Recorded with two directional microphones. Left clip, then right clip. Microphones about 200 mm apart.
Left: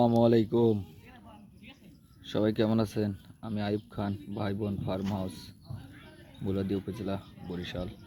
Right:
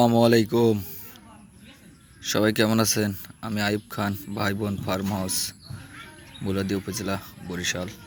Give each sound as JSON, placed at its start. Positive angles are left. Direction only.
{"t": 0.0, "sound": "speech", "side_deg": -10}
{"t": 2.2, "sound": "speech", "side_deg": -10}